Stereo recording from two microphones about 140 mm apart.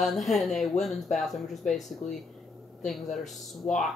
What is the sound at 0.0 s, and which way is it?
Speech, centre (ahead or behind).